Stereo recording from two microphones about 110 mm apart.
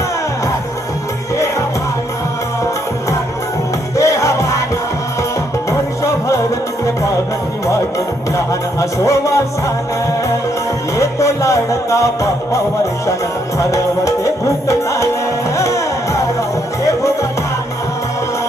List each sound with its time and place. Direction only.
3.9 s music: 30° left (ahead or behind)
6.0 s music: 30° left (ahead or behind)
8.8 s a man's voice: 30° left (ahead or behind)
10.9 s music: 30° left (ahead or behind)
13.6 s music: 30° left (ahead or behind)